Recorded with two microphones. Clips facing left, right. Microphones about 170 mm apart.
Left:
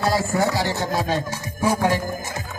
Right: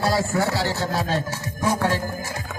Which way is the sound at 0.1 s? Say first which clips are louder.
Left 1 dB; 15° left (ahead or behind).